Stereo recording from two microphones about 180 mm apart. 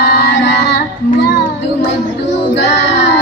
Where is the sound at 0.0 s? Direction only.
75° left (ahead or behind).